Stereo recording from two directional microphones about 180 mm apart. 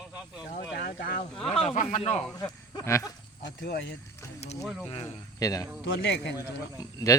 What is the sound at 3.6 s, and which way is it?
Speech, 70° left (ahead or behind).